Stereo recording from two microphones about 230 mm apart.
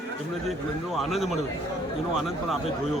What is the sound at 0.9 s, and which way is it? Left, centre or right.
Speech, centre.